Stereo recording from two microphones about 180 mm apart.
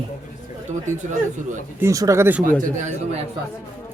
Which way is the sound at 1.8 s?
15° right (ahead or behind).